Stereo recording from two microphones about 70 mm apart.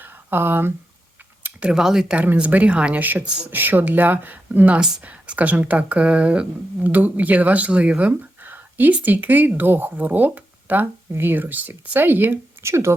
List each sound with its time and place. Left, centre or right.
0.0 s a sound: right
1.6 s speech: centre
2.1 s speech: centre
12.6 s speech: right